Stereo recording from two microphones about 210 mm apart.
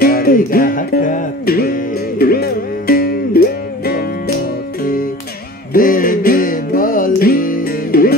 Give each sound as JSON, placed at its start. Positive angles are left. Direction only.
{"t": 0.0, "sound": "music", "side_deg": 45}
{"t": 5.7, "sound": "music", "side_deg": 40}